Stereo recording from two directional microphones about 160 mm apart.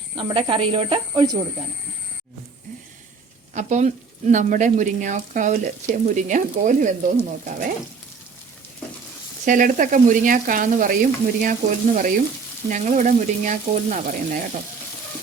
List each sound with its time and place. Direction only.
0.2 s speech: 30° right (ahead or behind)
3.5 s speech: 45° right (ahead or behind)
9.5 s frying: 55° right (ahead or behind)
12.6 s speech: 50° right (ahead or behind)